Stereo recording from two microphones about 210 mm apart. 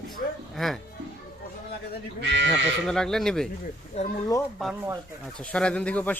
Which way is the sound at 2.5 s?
Centre (ahead or behind).